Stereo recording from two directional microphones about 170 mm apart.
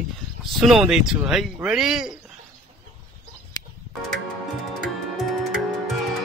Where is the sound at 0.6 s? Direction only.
Centre (ahead or behind).